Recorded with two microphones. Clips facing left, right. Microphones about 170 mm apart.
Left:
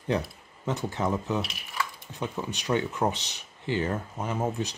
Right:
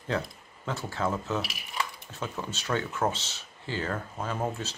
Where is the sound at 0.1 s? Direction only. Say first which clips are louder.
Left 2 dB; 20° left (ahead or behind).